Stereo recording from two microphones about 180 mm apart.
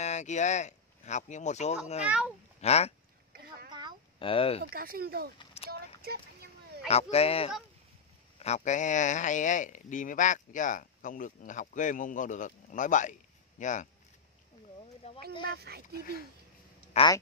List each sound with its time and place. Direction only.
0.0 s speech: 40° left (ahead or behind)
2.0 s speech: 5° right (ahead or behind)
2.6 s speech: 35° left (ahead or behind)
3.3 s a sound: 55° right (ahead or behind)
4.2 s speech: 30° left (ahead or behind)
4.7 s speech: 55° right (ahead or behind)
5.6 s clip-clop: 35° left (ahead or behind)
6.9 s speech: 35° left (ahead or behind)
15.0 s speech: 35° left (ahead or behind)
15.4 s speech: 60° right (ahead or behind)
17.0 s speech: 35° left (ahead or behind)